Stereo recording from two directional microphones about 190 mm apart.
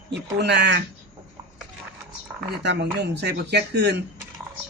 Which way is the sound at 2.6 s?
65° right (ahead or behind).